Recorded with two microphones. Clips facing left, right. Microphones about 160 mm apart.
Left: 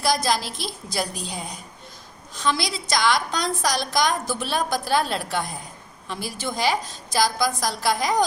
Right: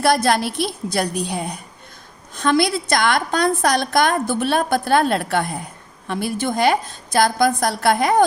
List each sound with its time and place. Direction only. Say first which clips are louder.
0.0 s a woman's voice: right 6 dB; 60° right (ahead or behind)